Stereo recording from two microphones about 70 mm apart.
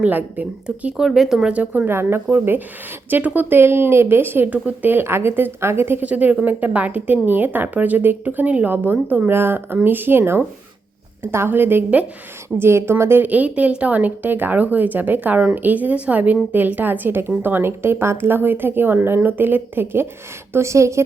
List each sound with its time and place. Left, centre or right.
0.0 s speech: right
0.9 s speech: centre
1.5 s speech: right
1.9 s a woman's voice: right
4.4 s a woman's voice: centre
6.1 s a woman's voice: right
13.2 s a woman's voice: right